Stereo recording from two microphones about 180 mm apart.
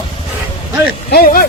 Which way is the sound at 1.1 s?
55° left (ahead or behind).